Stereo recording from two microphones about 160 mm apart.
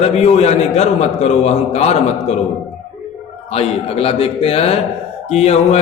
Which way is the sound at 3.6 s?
40° left (ahead or behind).